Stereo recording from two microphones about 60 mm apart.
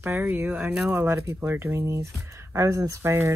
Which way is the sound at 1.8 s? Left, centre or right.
Right.